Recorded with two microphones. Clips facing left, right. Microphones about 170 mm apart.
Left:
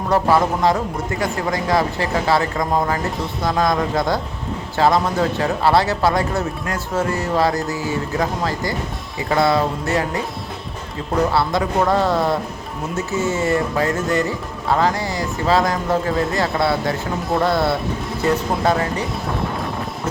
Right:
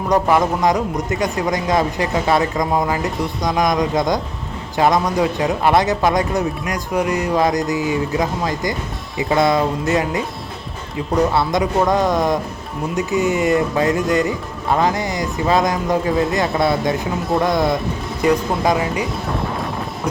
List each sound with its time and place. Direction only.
0.1 s speech: 15° right (ahead or behind)
11.3 s speech: 20° right (ahead or behind)